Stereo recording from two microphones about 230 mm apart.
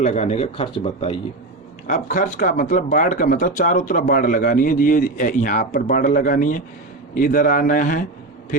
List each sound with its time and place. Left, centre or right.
0.0 s speech: left